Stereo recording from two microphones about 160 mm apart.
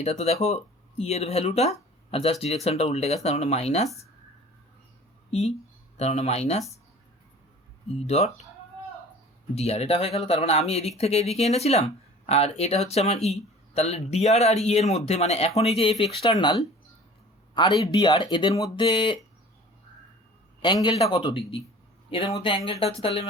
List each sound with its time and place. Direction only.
0.0 s speech: 40° left (ahead or behind)
6.0 s speech: 40° left (ahead or behind)
7.9 s speech: 40° left (ahead or behind)
9.6 s a man's voice: 40° left (ahead or behind)
20.6 s a man's voice: 30° left (ahead or behind)